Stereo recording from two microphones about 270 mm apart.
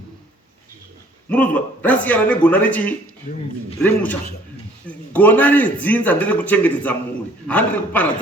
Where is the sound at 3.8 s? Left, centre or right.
Centre.